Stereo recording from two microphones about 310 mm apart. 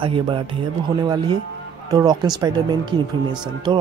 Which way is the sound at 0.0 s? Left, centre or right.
Centre.